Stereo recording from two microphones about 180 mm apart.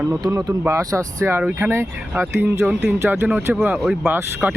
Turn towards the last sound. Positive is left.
turn(degrees=-10)  # may be behind; listen again after turning